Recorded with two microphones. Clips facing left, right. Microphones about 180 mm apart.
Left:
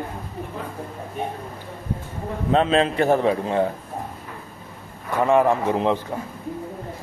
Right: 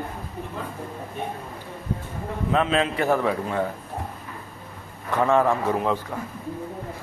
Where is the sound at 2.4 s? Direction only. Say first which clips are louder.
Left 4 dB; 35° left (ahead or behind).